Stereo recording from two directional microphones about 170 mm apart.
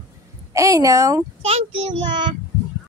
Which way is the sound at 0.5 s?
20° right (ahead or behind).